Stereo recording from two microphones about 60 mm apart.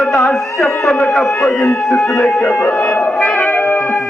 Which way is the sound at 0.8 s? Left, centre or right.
Centre.